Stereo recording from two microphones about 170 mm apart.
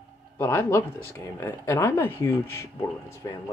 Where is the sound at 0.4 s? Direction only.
15° left (ahead or behind).